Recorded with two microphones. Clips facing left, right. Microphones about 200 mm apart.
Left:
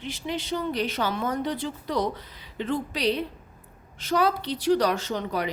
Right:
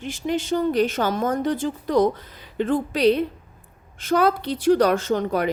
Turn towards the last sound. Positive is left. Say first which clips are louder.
# right 6 dB
turn(degrees=-50)  # may be behind; listen again after turning